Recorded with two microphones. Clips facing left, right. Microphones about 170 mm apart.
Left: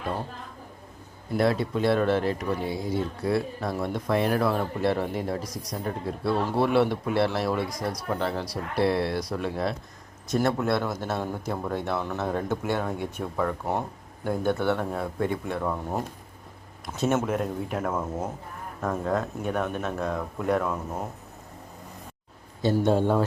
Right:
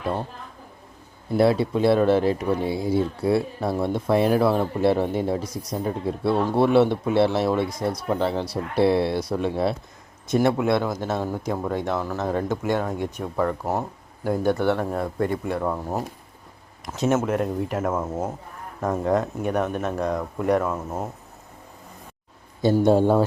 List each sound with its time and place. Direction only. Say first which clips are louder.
1.4 s speech: right 5 dB; 30° right (ahead or behind)
1.9 s speech: right 5 dB; 5° right (ahead or behind)
2.6 s speech: right 5 dB; 30° right (ahead or behind)
10.2 s speech: right 4 dB; 5° right (ahead or behind)
18.1 s speech: right 3 dB; 25° right (ahead or behind); by 20.1 s 10° right (ahead or behind)
20.1 s speech: right 4 dB; centre (ahead or behind)
22.8 s a man's voice: right 5 dB; 40° right (ahead or behind)